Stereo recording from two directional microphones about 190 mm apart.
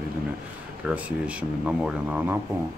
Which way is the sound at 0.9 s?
5° right (ahead or behind).